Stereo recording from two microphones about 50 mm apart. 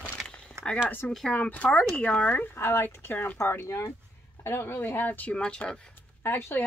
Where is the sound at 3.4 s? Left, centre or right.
Left.